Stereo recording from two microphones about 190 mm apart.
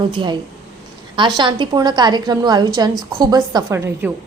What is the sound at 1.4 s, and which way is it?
A woman's voice, 25° right (ahead or behind).